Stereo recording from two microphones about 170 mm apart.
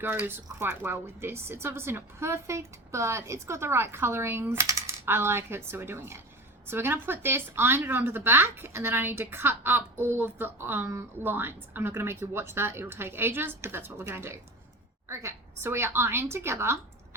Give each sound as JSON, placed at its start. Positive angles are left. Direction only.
{"t": 0.0, "sound": "a woman's voice", "side_deg": -15}